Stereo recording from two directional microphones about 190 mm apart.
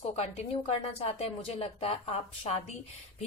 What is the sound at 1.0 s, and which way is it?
A woman's voice, 30° left (ahead or behind).